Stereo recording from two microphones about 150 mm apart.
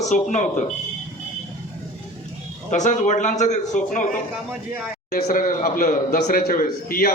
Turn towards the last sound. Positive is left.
turn(degrees=75)  # may be behind; listen again after turning